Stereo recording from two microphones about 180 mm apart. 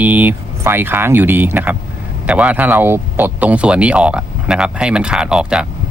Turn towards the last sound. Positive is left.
turn(degrees=-5)  # may be behind; listen again after turning